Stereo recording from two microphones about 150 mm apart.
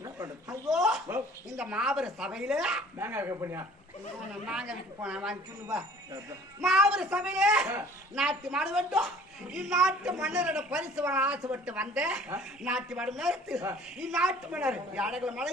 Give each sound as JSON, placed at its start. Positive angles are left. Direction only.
{"t": 0.0, "sound": "speech", "side_deg": -20}
{"t": 0.7, "sound": "a sound", "side_deg": 0}
{"t": 1.5, "sound": "a child's voice", "side_deg": -5}
{"t": 3.0, "sound": "speech", "side_deg": -15}
{"t": 4.3, "sound": "a child's voice", "side_deg": -5}
{"t": 6.6, "sound": "a child's voice", "side_deg": 0}